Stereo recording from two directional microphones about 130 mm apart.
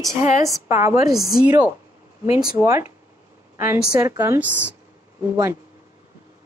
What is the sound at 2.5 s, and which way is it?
Speech, 20° right (ahead or behind).